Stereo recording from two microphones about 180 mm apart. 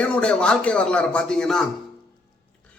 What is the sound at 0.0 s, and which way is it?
Speech, 5° left (ahead or behind).